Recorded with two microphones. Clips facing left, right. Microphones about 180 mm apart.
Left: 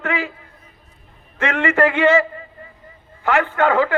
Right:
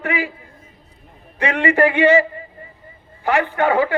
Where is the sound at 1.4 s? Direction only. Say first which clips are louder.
Right 1 dB; 15° right (ahead or behind).